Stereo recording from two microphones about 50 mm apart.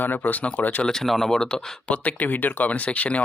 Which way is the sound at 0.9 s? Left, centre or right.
Centre.